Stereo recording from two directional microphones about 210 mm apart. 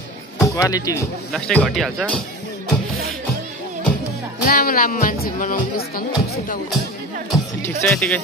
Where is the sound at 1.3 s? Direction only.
5° left (ahead or behind).